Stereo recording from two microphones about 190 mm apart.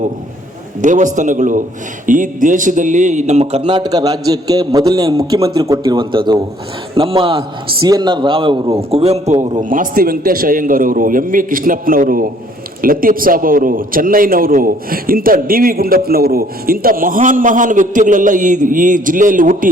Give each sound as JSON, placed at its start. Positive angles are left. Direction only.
{"t": 0.8, "sound": "a man's voice", "side_deg": -40}